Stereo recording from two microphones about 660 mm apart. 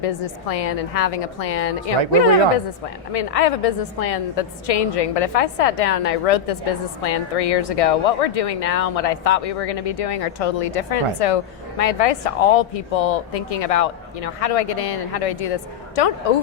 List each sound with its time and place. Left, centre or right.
0.0 s a woman's voice: left
3.1 s a woman's voice: left